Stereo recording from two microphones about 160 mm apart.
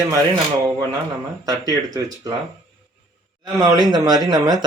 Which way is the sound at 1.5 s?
25° right (ahead or behind).